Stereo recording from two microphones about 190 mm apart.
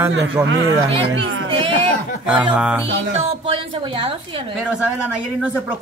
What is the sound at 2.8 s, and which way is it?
A woman's voice, 30° right (ahead or behind).